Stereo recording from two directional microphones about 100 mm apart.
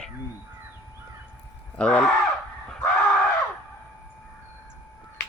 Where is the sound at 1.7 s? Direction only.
10° left (ahead or behind).